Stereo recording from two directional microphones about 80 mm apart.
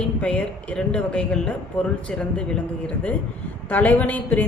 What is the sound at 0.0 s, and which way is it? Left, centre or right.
A woman's voice, centre.